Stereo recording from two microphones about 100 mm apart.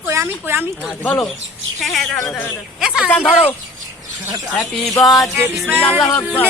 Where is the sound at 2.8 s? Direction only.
5° right (ahead or behind).